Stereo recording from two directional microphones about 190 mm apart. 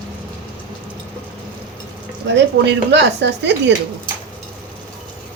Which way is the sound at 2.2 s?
65° right (ahead or behind).